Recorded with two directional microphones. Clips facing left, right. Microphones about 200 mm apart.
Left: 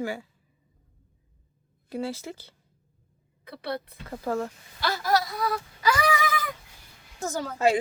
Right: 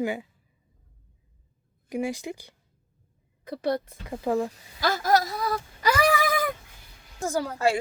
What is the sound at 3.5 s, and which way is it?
Speech, 45° right (ahead or behind).